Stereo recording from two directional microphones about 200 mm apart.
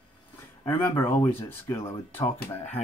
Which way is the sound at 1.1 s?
10° left (ahead or behind).